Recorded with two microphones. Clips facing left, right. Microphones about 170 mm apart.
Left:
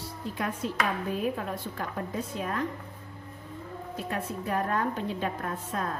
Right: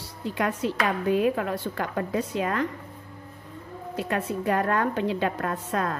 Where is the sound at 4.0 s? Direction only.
80° right.